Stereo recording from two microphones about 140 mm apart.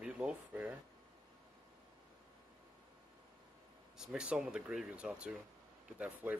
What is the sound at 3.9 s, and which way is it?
Speech, 5° right (ahead or behind).